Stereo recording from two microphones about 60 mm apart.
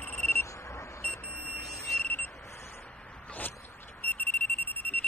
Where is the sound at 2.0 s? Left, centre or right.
Left.